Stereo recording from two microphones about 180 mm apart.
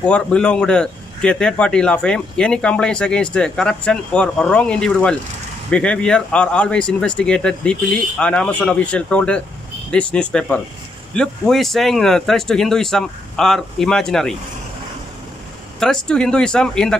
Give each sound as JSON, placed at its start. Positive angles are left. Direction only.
{"t": 0.0, "sound": "a man's voice", "side_deg": 5}
{"t": 15.8, "sound": "a man's voice", "side_deg": 5}